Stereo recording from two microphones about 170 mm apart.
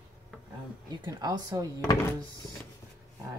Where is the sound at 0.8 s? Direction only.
25° right (ahead or behind).